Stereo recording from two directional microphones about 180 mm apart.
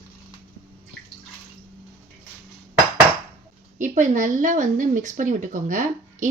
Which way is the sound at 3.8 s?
45° right (ahead or behind).